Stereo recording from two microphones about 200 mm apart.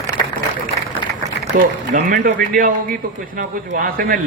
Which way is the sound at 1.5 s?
40° right (ahead or behind).